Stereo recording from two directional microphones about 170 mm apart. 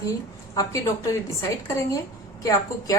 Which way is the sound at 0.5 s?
20° left (ahead or behind).